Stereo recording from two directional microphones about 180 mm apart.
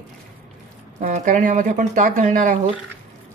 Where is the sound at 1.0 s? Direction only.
45° right (ahead or behind).